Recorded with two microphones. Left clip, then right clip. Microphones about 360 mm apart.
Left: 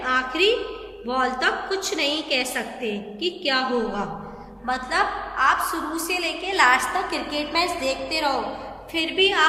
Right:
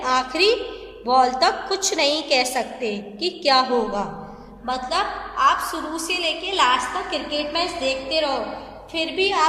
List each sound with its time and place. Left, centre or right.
0.0 s a woman's voice: centre